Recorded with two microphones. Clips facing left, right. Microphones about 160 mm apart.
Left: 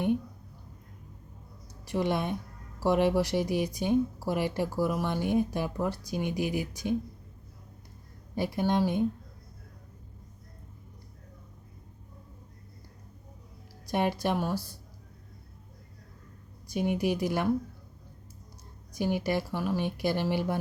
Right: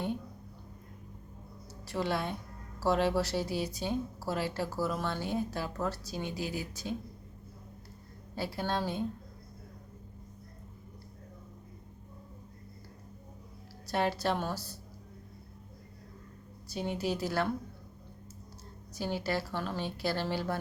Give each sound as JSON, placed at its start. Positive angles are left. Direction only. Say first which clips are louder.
{"t": 1.9, "sound": "a woman's voice", "louder": "left 4 dB", "side_deg": 15}
{"t": 8.4, "sound": "a woman's voice", "louder": "left 6 dB", "side_deg": 15}
{"t": 13.8, "sound": "a woman's voice", "louder": "left 2 dB", "side_deg": 15}
{"t": 16.6, "sound": "a woman's voice", "louder": "left 5 dB", "side_deg": 15}
{"t": 18.9, "sound": "a woman's voice", "louder": "left 5 dB", "side_deg": 15}